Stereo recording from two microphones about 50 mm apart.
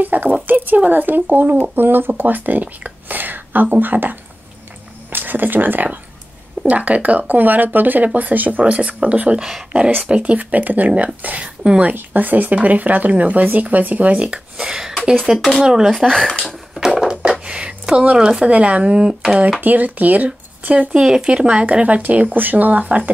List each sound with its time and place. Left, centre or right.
0.0 s speech: right
6.6 s speech: right
9.4 s speech: centre
10.0 s speech: right
11.2 s speech: right
11.9 s speech: right; by 15.9 s centre
16.9 s a sound: centre
18.5 s speech: right
19.6 s speech: right
20.9 s speech: centre
22.3 s speech: right